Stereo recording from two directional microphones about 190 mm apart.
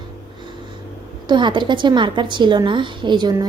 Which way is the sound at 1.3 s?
25° right (ahead or behind).